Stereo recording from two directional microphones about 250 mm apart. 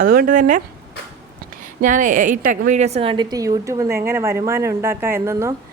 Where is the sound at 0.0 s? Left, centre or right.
Right.